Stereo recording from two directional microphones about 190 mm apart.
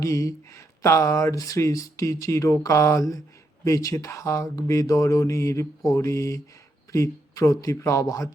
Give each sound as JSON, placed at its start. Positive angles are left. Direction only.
{"t": 0.0, "sound": "speech", "side_deg": 15}